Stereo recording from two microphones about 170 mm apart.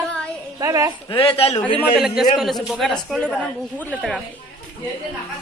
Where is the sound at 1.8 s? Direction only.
Centre (ahead or behind).